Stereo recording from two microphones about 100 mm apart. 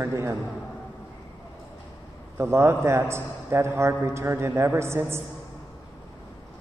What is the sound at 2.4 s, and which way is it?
A man's voice, 25° right (ahead or behind).